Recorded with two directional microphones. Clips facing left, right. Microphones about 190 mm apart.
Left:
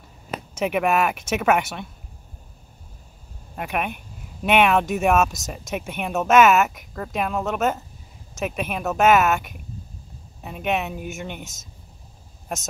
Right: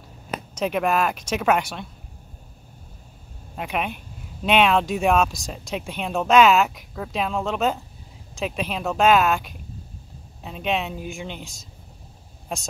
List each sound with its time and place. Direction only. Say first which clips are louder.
0.6 s speech: left 1 dB; 10° left (ahead or behind)
3.5 s speech: even; 5° left (ahead or behind)